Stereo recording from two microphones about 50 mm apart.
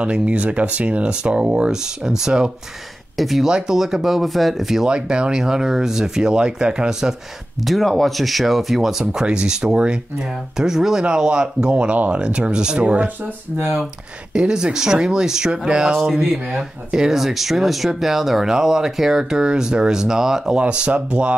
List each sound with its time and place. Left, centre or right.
0.0 s speech: right
3.2 s speech: centre
3.4 s speech: centre
4.8 s speech: centre
7.6 s speech: centre
9.1 s speech: centre
14.3 s speech: centre
20.5 s speech: centre